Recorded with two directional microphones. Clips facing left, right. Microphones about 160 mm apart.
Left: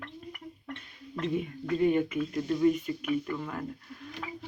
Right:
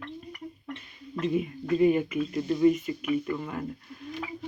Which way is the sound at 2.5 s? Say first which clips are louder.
Right 3 dB; 5° right (ahead or behind).